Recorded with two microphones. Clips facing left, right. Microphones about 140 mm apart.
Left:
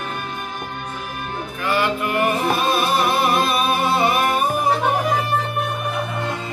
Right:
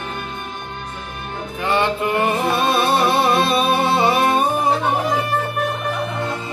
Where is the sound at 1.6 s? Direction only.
25° right (ahead or behind).